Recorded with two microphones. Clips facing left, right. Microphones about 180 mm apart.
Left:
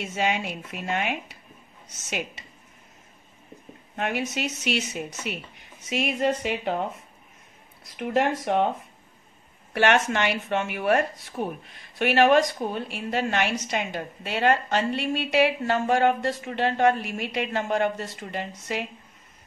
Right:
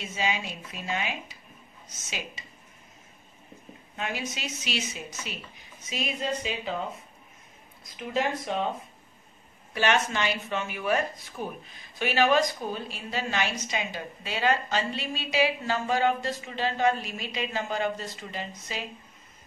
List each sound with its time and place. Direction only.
0.0 s speech: 65° left (ahead or behind)
3.9 s speech: 60° left (ahead or behind)
7.9 s speech: 70° left (ahead or behind)
9.8 s speech: 70° left (ahead or behind)